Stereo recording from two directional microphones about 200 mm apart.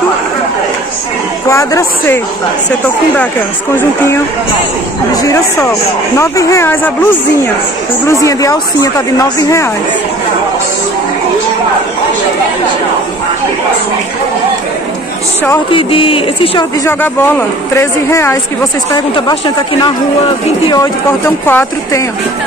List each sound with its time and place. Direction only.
1.5 s speech: 15° left (ahead or behind)
5.1 s speech: 15° left (ahead or behind)
8.1 s speech: 15° left (ahead or behind)
15.7 s a sound: 25° left (ahead or behind)
16.8 s speech: 10° left (ahead or behind)
18.9 s a sound: 25° left (ahead or behind)
21.5 s speech: 10° left (ahead or behind)